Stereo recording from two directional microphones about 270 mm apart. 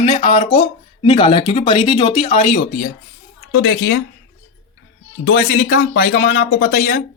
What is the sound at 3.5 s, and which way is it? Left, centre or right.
Speech, left.